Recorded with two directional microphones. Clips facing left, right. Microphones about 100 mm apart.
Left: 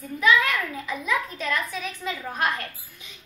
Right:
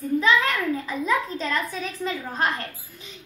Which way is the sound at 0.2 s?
30° right (ahead or behind).